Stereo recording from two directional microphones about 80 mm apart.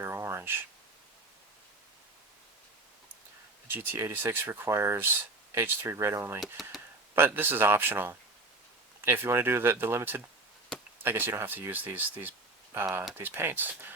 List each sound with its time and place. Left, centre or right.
0.0 s a sound: right
3.7 s speech: right
6.4 s speech: centre
7.2 s speech: right